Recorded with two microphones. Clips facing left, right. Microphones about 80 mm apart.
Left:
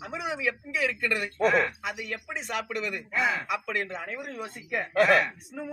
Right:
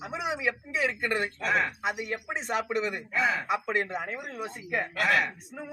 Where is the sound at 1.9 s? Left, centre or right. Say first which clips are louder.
Right 2 dB; right.